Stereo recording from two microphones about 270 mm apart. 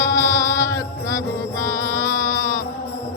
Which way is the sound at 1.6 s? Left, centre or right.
Centre.